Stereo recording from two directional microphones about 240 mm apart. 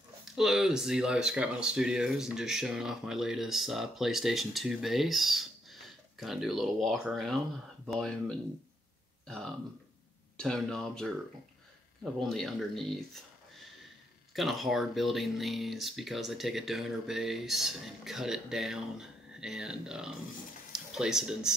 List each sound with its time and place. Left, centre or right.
0.2 s speech: centre
10.3 s speech: centre
14.3 s speech: centre